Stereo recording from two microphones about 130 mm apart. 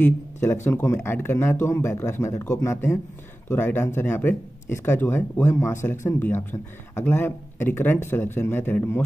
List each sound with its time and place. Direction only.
0.0 s speech: 15° left (ahead or behind)